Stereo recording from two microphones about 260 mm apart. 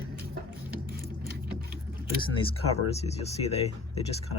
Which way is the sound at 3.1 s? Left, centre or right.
Left.